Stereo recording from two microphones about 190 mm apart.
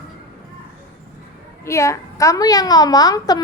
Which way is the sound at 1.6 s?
15° left (ahead or behind).